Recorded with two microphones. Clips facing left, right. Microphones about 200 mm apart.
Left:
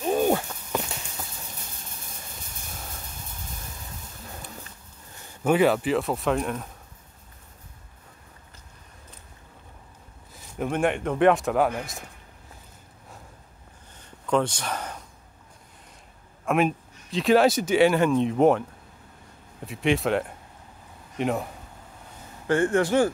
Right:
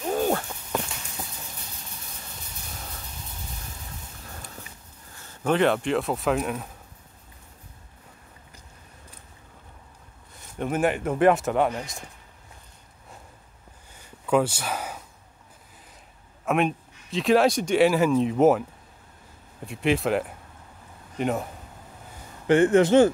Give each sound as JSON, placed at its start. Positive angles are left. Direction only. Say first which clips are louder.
{"t": 0.0, "sound": "walk", "louder": "left 2 dB", "side_deg": 15}
{"t": 0.5, "sound": "walk", "louder": "even", "side_deg": -5}
{"t": 5.2, "sound": "speech", "louder": "left 2 dB", "side_deg": 10}
{"t": 10.3, "sound": "speech", "louder": "even", "side_deg": 0}
{"t": 13.9, "sound": "a sound", "louder": "right 2 dB", "side_deg": -10}
{"t": 16.4, "sound": "speech", "louder": "left 1 dB", "side_deg": 0}
{"t": 19.6, "sound": "speech", "louder": "even", "side_deg": 0}
{"t": 22.5, "sound": "speech", "louder": "right 4 dB", "side_deg": -20}